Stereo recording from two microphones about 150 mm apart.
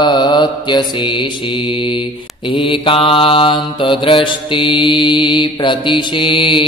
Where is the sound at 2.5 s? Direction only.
35° left (ahead or behind).